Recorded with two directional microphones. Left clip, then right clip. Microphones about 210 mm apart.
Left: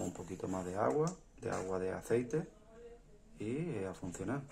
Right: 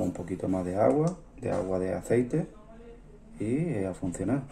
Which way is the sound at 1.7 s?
5° left (ahead or behind).